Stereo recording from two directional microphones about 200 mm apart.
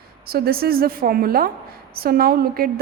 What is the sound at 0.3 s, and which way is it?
A woman's voice, 50° right (ahead or behind).